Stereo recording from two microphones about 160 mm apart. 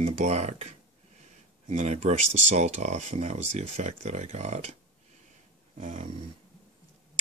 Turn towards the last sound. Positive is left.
turn(degrees=-55)  # may be behind; listen again after turning